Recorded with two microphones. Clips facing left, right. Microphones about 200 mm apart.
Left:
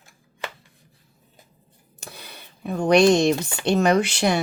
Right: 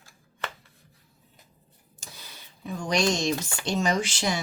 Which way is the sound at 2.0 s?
60° left (ahead or behind).